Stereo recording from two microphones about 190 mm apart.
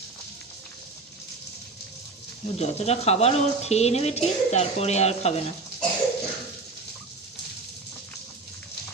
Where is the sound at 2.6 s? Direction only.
35° left (ahead or behind).